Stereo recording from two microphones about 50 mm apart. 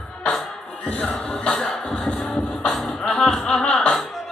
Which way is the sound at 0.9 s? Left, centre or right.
Left.